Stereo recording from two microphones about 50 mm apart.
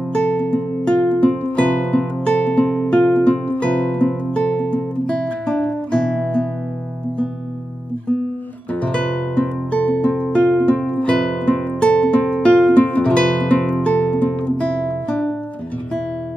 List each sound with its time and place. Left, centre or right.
0.1 s music: left
8.7 s music: left